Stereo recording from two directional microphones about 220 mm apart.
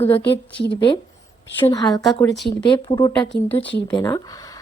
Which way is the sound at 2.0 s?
Centre (ahead or behind).